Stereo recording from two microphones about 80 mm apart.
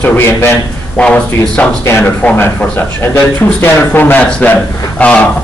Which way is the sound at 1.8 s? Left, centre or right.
Left.